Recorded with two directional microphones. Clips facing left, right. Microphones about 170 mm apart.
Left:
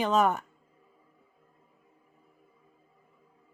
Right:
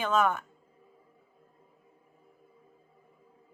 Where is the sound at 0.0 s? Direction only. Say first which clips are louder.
Left 2 dB; 35° left (ahead or behind).